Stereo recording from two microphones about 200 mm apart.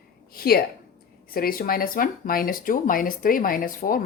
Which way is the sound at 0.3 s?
50° left (ahead or behind).